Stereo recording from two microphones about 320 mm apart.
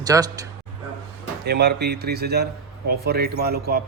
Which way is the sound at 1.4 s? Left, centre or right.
Right.